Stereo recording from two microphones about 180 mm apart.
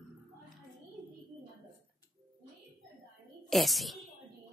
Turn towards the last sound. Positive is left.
turn(degrees=0)  # may be behind; listen again after turning